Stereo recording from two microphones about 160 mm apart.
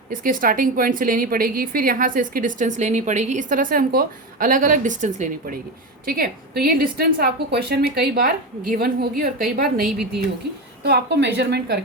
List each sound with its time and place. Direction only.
0.1 s a woman's voice: 60° right (ahead or behind)
6.1 s a woman's voice: 70° right (ahead or behind)
10.8 s a woman's voice: 90° right